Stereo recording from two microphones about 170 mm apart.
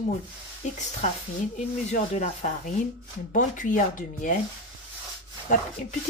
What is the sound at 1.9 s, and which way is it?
Speech, 45° left (ahead or behind).